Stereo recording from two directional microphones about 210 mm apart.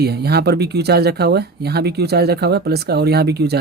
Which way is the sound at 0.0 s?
50° right (ahead or behind).